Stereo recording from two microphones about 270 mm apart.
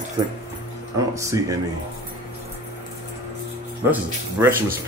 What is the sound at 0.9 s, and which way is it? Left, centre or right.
Speech, centre.